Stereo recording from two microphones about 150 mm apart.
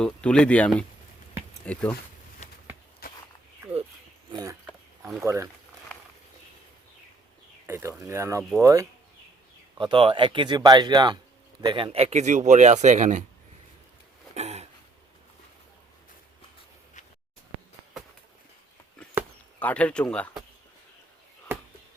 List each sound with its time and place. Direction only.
0.0 s speech: 5° left (ahead or behind)
3.0 s walk: 90° left
4.3 s a sound: 25° right (ahead or behind)
4.6 s a sound: 5° right (ahead or behind)
5.2 s speech: 20° right (ahead or behind)
7.7 s speech: 20° right (ahead or behind)
9.7 s speech: 35° right (ahead or behind); by 13.2 s 55° right (ahead or behind)
14.3 s a sound: 45° right (ahead or behind)
19.5 s speech: 10° left (ahead or behind)